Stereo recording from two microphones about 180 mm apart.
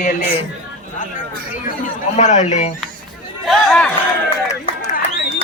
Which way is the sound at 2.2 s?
40° left (ahead or behind).